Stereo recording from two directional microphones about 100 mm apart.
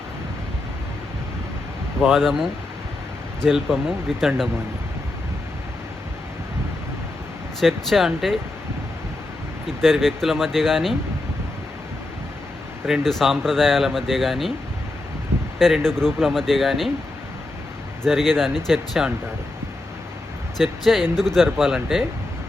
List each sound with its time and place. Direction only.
2.0 s speech: centre (ahead or behind)
7.6 s speech: centre (ahead or behind)
9.6 s speech: 5° left (ahead or behind)
12.9 s speech: centre (ahead or behind)
15.5 s speech: 5° left (ahead or behind)
18.0 s speech: centre (ahead or behind)
20.6 s speech: centre (ahead or behind)